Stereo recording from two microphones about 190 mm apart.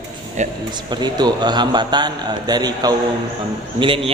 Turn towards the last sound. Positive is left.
turn(degrees=-25)  # may be behind; listen again after turning